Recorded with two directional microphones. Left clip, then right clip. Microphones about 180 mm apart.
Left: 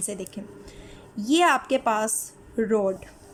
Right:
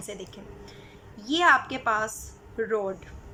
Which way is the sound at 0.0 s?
30° left (ahead or behind).